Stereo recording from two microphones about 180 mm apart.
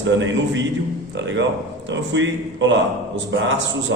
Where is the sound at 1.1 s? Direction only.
80° right.